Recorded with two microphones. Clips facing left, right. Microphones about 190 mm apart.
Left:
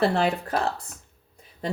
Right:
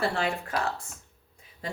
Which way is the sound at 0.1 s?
40° left (ahead or behind).